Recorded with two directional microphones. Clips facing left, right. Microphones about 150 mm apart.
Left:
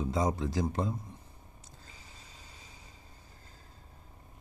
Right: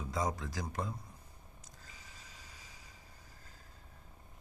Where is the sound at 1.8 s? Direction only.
30° left (ahead or behind).